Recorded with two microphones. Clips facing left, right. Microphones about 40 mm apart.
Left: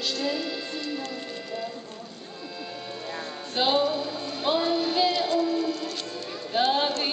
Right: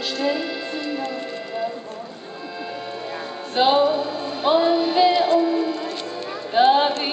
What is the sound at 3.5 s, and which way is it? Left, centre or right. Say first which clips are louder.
Music: right 7 dB; centre.